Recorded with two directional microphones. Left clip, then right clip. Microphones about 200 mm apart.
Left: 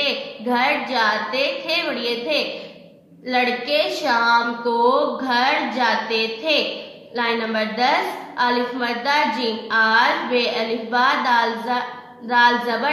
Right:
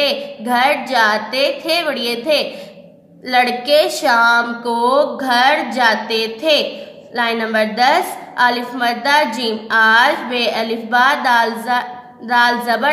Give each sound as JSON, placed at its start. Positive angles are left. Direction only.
{"t": 0.0, "sound": "a woman's voice", "side_deg": -50}